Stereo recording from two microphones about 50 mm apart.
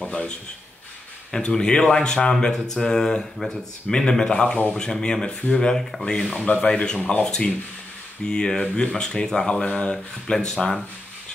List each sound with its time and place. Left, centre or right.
0.0 s a sound: left
1.3 s speech: centre
6.1 s speech: centre